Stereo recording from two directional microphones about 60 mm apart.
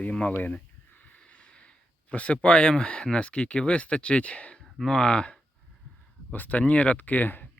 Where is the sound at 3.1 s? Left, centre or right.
Centre.